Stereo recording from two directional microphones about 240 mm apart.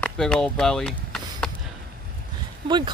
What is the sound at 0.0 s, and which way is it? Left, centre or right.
Chop, centre.